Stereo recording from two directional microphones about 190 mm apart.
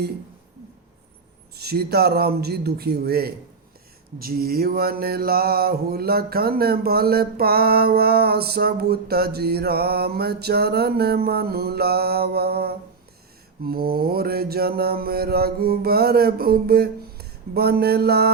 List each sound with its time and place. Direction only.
1.5 s mantra: 55° right (ahead or behind)